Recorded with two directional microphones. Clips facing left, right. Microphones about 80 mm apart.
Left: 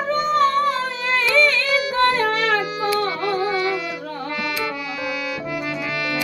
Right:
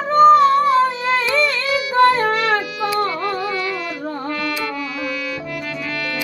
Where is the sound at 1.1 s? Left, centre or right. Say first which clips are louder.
Left 5 dB; right.